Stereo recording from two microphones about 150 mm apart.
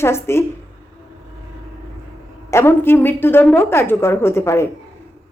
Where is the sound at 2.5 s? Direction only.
15° left (ahead or behind).